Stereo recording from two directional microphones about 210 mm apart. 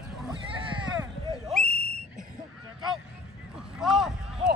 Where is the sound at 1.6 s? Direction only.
45° left (ahead or behind).